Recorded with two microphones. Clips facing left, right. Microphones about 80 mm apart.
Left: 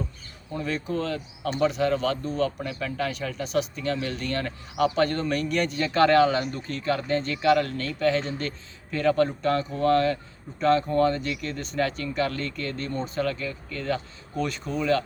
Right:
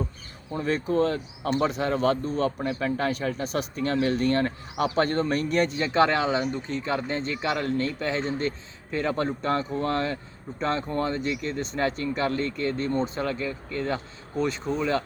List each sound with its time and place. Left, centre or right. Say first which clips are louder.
0.5 s a man's voice: right 4 dB; right